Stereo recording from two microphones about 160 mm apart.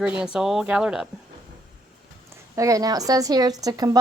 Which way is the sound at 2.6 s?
20° right (ahead or behind).